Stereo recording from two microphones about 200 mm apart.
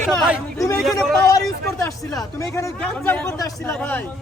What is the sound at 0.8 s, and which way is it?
Speech, centre (ahead or behind).